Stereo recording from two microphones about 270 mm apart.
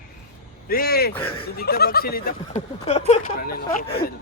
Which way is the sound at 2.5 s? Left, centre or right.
Left.